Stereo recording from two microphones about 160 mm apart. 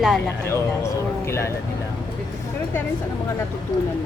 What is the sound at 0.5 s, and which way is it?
Speech, 15° left (ahead or behind).